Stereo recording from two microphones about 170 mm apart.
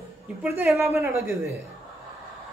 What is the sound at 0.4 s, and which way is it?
Speech, 10° right (ahead or behind).